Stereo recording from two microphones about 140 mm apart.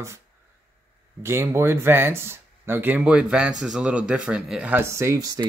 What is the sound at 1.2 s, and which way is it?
Speech, 20° right (ahead or behind).